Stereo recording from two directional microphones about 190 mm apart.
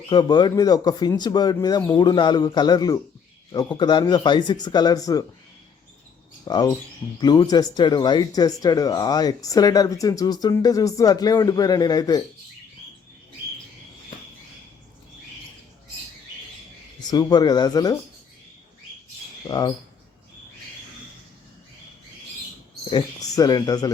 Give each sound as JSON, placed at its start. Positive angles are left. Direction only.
{"t": 0.1, "sound": "speech", "side_deg": 20}
{"t": 6.4, "sound": "speech", "side_deg": 20}
{"t": 17.0, "sound": "speech", "side_deg": 20}
{"t": 19.5, "sound": "speech", "side_deg": 20}
{"t": 22.9, "sound": "speech", "side_deg": 20}